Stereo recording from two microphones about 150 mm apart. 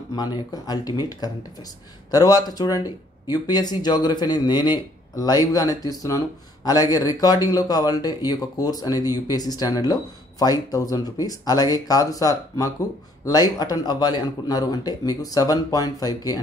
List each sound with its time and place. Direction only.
0.1 s speech: 30° left (ahead or behind)